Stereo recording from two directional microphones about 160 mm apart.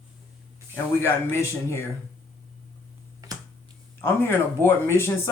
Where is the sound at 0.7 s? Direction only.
15° left (ahead or behind).